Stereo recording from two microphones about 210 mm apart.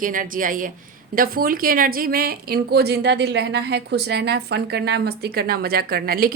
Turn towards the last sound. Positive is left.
turn(degrees=-45)  # may be behind; listen again after turning